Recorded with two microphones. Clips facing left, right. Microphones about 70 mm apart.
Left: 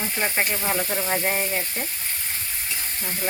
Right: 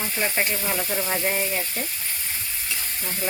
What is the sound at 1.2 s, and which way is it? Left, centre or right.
Speech, left.